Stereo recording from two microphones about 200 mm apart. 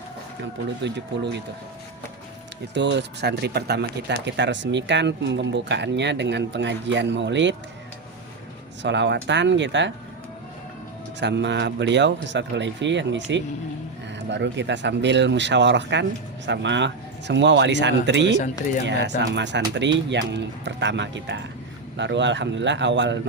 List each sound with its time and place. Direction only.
0.8 s speech: 60° right (ahead or behind)
2.7 s speech: 60° right (ahead or behind)
8.8 s speech: 65° right (ahead or behind)
11.2 s speech: 60° right (ahead or behind)